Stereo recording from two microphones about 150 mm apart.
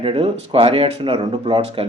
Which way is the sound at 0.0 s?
35° right (ahead or behind).